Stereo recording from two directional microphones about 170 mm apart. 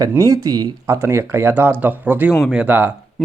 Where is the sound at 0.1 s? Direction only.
20° right (ahead or behind).